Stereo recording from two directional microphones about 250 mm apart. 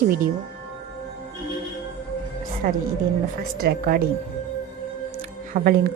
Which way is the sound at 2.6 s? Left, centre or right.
Right.